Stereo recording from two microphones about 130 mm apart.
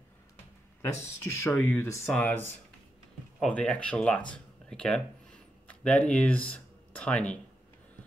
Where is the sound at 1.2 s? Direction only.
20° left (ahead or behind).